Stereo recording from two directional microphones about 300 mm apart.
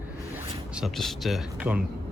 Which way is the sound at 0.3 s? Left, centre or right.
Centre.